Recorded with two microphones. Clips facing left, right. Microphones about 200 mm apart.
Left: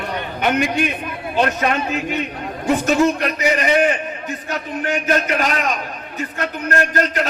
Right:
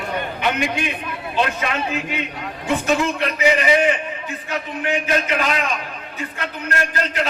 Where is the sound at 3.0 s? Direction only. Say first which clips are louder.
Left 2 dB; 40° left (ahead or behind).